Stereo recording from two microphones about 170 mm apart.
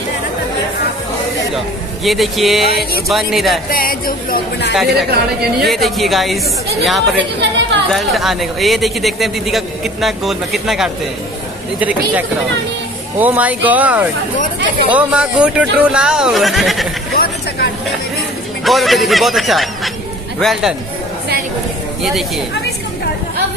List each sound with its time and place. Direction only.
2.0 s a man's voice: centre (ahead or behind)
3.7 s speech: 60° left (ahead or behind)
5.1 s speech: 70° right (ahead or behind)
5.7 s a man's voice: centre (ahead or behind)
17.1 s a sound: 65° left (ahead or behind)
18.6 s a man's voice: centre (ahead or behind)